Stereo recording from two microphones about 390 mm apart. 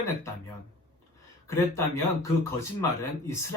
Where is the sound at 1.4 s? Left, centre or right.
Centre.